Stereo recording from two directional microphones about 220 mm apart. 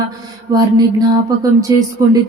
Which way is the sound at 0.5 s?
20° right (ahead or behind).